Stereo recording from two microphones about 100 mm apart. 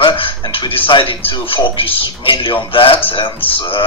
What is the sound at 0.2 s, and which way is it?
Speech, 65° left (ahead or behind).